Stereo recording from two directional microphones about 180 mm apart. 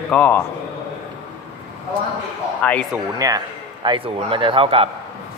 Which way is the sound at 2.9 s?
20° right (ahead or behind).